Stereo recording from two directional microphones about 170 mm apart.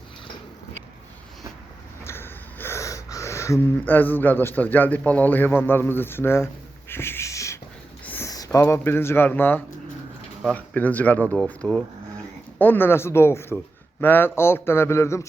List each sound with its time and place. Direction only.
2.0 s wheeze: 15° left (ahead or behind)
8.0 s a sound: 10° left (ahead or behind)
8.3 s speech: 20° left (ahead or behind)